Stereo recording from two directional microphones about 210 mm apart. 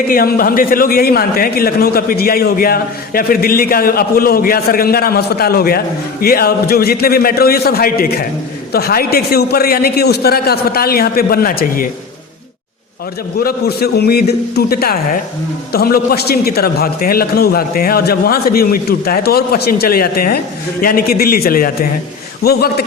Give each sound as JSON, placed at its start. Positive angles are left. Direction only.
{"t": 0.1, "sound": "a man's voice", "side_deg": 45}
{"t": 13.4, "sound": "a man's voice", "side_deg": 50}